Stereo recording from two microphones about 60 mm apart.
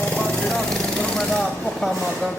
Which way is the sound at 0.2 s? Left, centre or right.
Centre.